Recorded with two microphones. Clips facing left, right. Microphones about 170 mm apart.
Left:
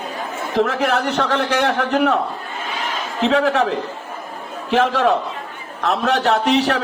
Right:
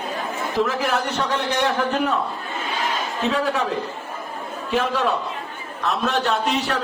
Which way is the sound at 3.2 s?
70° left (ahead or behind).